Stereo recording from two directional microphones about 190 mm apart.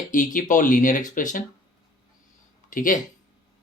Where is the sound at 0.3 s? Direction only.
45° left (ahead or behind).